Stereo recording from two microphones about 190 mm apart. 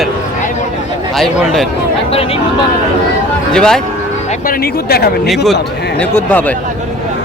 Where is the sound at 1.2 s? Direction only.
Centre (ahead or behind).